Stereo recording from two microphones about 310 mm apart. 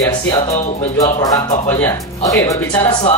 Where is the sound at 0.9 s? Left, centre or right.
Centre.